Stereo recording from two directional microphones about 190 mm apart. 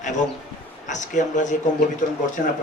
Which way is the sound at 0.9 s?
40° left (ahead or behind).